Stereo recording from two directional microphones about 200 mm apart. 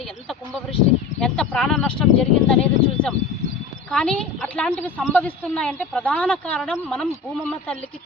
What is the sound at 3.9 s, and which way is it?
Speech, 5° left (ahead or behind).